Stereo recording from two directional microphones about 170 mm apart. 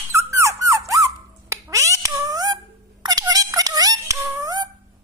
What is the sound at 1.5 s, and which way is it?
Cat, 20° right (ahead or behind).